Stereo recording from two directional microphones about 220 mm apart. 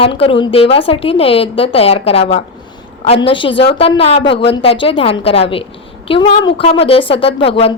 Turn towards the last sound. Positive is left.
turn(degrees=25)  # may be behind; listen again after turning